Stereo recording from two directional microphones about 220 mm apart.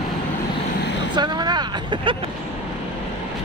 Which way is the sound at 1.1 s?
20° right (ahead or behind).